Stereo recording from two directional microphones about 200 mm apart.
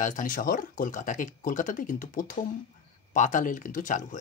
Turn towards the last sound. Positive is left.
turn(degrees=40)  # may be behind; listen again after turning